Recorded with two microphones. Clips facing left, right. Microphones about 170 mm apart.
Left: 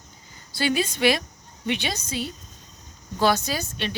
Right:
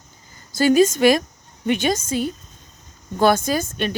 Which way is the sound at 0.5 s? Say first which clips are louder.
Right 10 dB; 45° right (ahead or behind).